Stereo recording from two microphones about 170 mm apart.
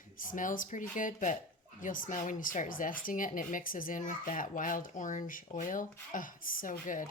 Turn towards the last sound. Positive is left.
turn(degrees=50)  # may be behind; listen again after turning